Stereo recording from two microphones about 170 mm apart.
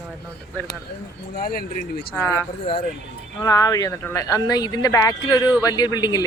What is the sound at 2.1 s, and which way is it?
Speech, 10° left (ahead or behind).